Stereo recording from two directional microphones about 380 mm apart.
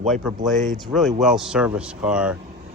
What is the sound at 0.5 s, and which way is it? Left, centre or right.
Speech, centre.